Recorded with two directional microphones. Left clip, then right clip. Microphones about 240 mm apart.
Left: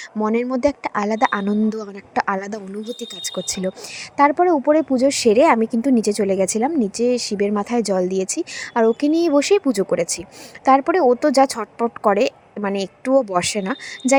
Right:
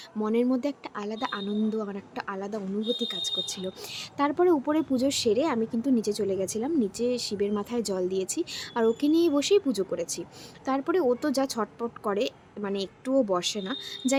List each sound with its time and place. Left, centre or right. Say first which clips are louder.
0.2 s speech: left 7 dB; left
4.2 s speech: left 9 dB; left